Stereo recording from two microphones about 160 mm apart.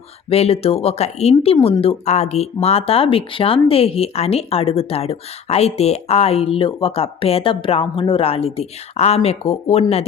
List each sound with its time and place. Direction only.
0.3 s speech: 40° left (ahead or behind)